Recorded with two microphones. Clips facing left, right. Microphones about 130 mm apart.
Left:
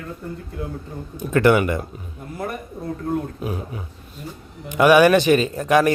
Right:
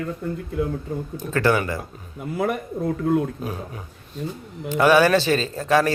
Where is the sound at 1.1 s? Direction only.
20° left (ahead or behind).